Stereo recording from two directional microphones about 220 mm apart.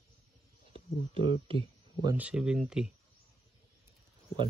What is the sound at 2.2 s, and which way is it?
Speech, 5° right (ahead or behind).